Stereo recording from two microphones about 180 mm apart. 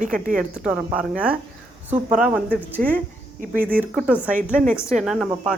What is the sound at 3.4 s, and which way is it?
Speech, 50° right (ahead or behind).